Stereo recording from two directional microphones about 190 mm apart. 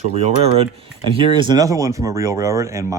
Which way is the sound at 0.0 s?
35° right (ahead or behind).